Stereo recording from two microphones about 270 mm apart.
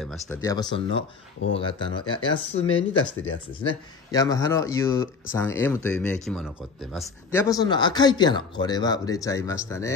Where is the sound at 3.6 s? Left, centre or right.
Centre.